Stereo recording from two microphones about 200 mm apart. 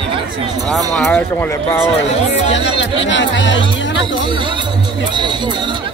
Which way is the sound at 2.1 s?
30° left (ahead or behind).